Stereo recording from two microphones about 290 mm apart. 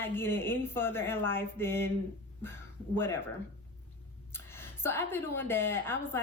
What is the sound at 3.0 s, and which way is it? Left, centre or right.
Speech, centre.